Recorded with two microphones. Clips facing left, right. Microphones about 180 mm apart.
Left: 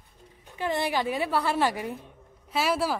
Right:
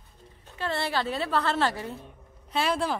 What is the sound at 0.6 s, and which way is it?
A woman's voice, 15° left (ahead or behind).